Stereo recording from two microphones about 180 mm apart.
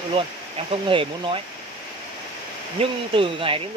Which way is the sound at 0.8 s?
30° right (ahead or behind).